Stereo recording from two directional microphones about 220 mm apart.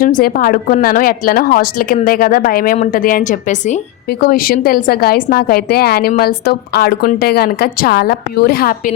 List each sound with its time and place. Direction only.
0.0 s a woman's voice: 40° left (ahead or behind)